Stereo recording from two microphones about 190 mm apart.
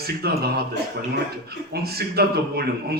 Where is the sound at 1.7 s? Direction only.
55° right (ahead or behind).